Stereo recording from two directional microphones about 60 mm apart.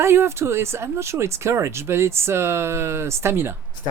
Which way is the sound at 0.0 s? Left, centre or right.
Right.